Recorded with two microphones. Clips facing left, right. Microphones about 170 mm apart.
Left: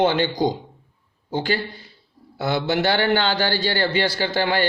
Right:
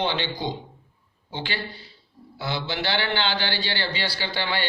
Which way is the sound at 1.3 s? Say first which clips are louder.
Left 8 dB; 40° left (ahead or behind).